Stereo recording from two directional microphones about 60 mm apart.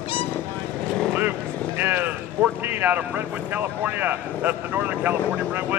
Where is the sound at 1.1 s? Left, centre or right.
Right.